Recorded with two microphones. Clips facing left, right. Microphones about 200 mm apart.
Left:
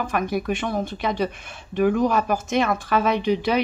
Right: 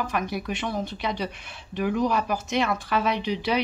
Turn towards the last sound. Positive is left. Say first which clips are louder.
# left 5 dB
turn(degrees=50)  # may be behind; listen again after turning